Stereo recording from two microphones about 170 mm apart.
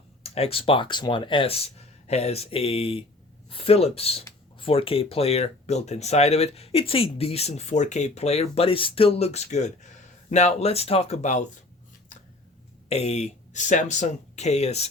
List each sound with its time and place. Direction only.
0.2 s speech: 35° left (ahead or behind)
12.9 s speech: 40° left (ahead or behind)